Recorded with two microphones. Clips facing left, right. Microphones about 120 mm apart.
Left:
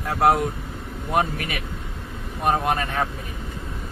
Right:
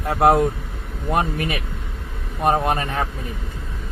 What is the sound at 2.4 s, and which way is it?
Speech, 25° right (ahead or behind).